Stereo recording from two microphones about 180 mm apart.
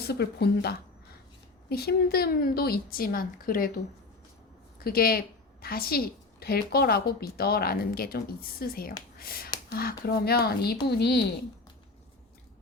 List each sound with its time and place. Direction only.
0.1 s speech: 65° left (ahead or behind)
4.8 s speech: 55° left (ahead or behind)
9.1 s a sound: 55° left (ahead or behind)
9.7 s speech: 60° left (ahead or behind)